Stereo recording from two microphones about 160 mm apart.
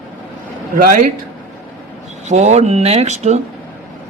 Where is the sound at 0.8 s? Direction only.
60° right (ahead or behind).